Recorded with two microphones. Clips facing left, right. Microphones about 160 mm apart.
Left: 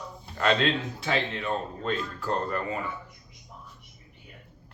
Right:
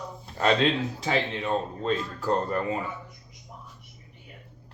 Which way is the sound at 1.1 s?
30° right (ahead or behind).